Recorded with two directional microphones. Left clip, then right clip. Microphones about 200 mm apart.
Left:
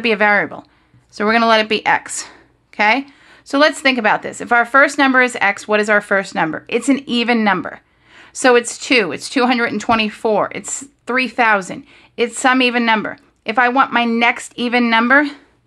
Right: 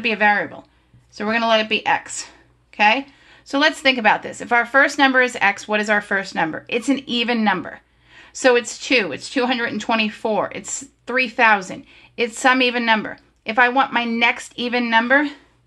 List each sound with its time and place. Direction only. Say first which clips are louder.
0.0 s speech: left 3 dB; 40° left (ahead or behind)